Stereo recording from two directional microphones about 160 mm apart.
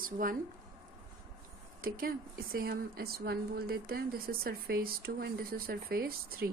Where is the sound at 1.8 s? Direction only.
65° right (ahead or behind).